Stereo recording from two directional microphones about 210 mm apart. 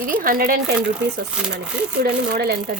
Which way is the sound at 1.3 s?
5° right (ahead or behind).